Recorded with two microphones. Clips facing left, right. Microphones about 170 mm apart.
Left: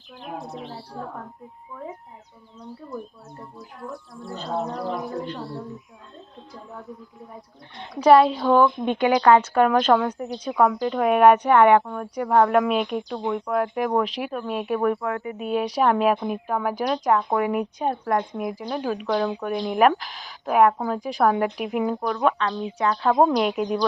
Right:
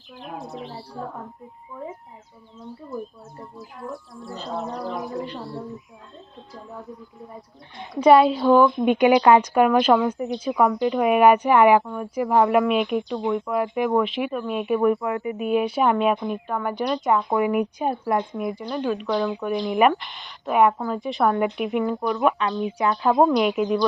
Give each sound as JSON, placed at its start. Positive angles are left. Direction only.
{"t": 0.2, "sound": "speech", "side_deg": 0}
{"t": 2.6, "sound": "speech", "side_deg": 0}
{"t": 8.8, "sound": "speech", "side_deg": -15}
{"t": 15.0, "sound": "speech", "side_deg": -15}
{"t": 15.4, "sound": "speech", "side_deg": -5}
{"t": 22.3, "sound": "speech", "side_deg": -15}
{"t": 23.4, "sound": "speech", "side_deg": 0}